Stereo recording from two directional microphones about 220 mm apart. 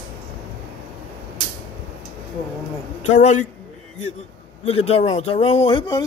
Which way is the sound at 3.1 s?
35° left (ahead or behind).